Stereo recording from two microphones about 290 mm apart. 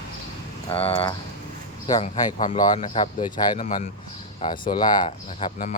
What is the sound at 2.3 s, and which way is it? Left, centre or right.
Speech, left.